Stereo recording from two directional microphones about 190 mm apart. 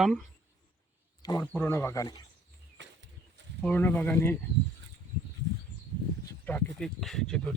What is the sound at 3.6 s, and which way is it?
Speech, 10° left (ahead or behind).